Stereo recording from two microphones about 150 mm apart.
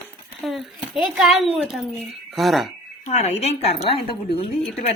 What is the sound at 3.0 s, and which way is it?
A woman's voice, 50° left (ahead or behind).